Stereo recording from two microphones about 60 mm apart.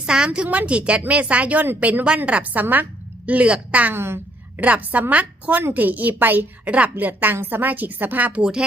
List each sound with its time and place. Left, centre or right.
0.0 s a woman's voice: centre
0.3 s speech: right
3.9 s a woman's voice: right
4.6 s a woman's voice: right
8.4 s speech: centre